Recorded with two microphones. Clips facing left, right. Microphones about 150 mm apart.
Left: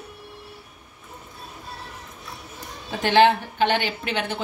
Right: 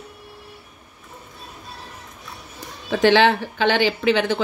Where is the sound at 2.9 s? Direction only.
90° right.